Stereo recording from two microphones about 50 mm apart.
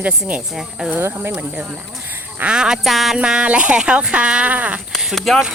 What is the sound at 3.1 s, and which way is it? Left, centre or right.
Speech, centre.